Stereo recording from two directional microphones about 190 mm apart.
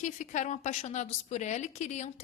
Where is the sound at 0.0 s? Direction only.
40° left (ahead or behind).